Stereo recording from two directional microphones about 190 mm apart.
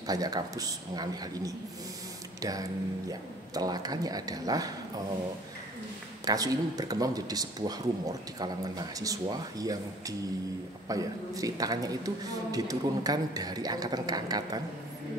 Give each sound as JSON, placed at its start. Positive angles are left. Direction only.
{"t": 0.0, "sound": "a man's voice", "side_deg": -20}
{"t": 6.2, "sound": "a man's voice", "side_deg": -20}